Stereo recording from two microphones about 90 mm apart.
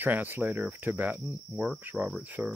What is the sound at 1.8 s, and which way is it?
Cricket, 15° right (ahead or behind).